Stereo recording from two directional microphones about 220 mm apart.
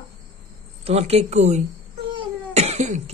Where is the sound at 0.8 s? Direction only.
30° right (ahead or behind).